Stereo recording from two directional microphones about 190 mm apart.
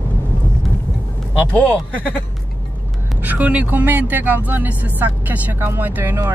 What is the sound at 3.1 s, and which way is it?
Speech, 10° right (ahead or behind).